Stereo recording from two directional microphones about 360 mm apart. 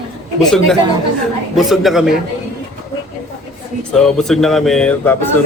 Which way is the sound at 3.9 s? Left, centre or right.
Centre.